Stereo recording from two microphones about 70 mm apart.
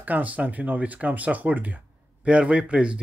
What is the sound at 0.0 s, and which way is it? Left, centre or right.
A man's voice, right.